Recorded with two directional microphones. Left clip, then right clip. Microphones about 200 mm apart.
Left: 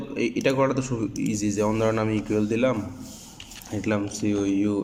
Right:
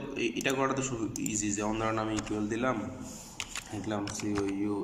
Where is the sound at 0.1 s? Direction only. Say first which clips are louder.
Left 7 dB; 25° left (ahead or behind).